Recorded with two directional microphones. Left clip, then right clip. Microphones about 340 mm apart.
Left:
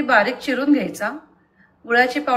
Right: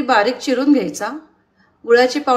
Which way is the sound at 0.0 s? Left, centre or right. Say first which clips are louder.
Right 2 dB; centre.